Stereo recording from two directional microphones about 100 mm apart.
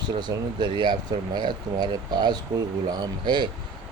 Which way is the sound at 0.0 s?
45° right (ahead or behind).